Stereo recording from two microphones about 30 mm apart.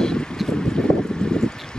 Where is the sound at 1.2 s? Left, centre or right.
Left.